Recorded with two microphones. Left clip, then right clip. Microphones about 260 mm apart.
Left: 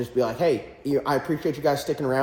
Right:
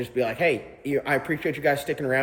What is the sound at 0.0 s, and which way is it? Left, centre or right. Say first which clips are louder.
A man's voice: left 1 dB; centre.